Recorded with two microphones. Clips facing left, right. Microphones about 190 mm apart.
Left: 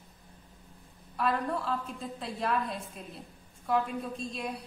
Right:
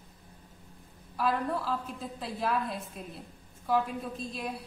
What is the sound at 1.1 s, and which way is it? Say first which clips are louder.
A woman's voice: right 1 dB; centre (ahead or behind).